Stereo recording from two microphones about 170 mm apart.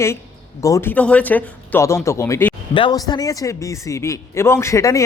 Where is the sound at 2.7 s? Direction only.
25° left (ahead or behind).